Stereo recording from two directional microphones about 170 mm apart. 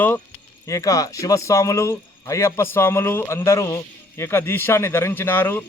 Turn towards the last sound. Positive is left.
turn(degrees=10)  # may be behind; listen again after turning